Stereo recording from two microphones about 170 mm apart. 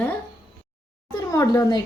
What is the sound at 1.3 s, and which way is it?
Speech, 20° left (ahead or behind).